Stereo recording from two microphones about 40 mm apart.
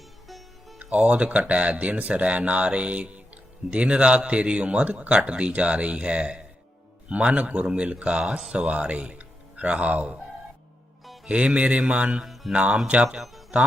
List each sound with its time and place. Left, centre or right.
0.3 s music: centre
0.8 s speech: right
8.2 s speech: centre
8.5 s speech: right
11.3 s speech: right
12.2 s music: centre
13.1 s speech: centre